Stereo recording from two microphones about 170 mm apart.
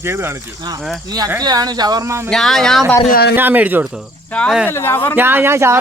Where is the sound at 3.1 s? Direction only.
65° left (ahead or behind).